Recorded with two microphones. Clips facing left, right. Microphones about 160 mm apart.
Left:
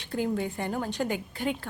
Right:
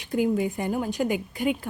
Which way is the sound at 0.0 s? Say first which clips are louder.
Right 5 dB; 10° right (ahead or behind).